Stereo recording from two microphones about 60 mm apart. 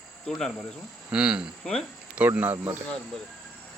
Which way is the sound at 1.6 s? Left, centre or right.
Centre.